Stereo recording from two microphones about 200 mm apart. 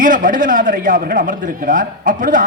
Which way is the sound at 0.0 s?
40° right (ahead or behind).